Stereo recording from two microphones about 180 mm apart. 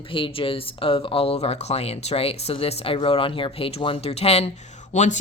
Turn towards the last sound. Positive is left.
turn(degrees=40)  # may be behind; listen again after turning